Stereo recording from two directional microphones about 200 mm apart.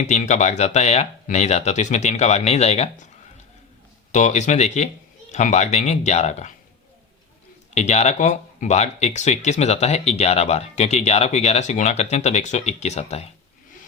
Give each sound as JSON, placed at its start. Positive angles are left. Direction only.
{"t": 0.0, "sound": "speech", "side_deg": 35}
{"t": 4.1, "sound": "speech", "side_deg": 35}
{"t": 7.7, "sound": "speech", "side_deg": 35}